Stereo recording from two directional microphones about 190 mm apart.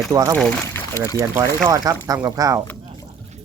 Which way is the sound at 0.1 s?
15° right (ahead or behind).